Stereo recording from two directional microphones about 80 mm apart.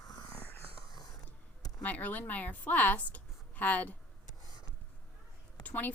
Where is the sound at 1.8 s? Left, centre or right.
Left.